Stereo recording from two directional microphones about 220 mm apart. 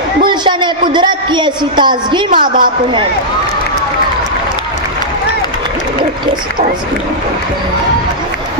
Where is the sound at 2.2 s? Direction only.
40° right (ahead or behind).